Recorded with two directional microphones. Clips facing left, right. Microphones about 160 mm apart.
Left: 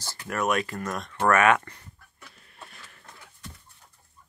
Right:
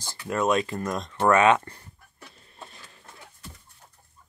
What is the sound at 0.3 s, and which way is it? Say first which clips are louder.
Speech: right 3 dB; 20° right (ahead or behind).